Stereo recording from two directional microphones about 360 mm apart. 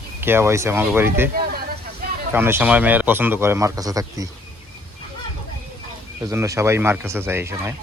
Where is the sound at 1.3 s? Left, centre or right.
Right.